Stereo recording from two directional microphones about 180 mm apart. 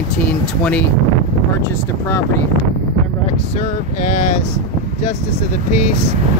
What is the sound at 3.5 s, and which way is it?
Speech, 40° left (ahead or behind).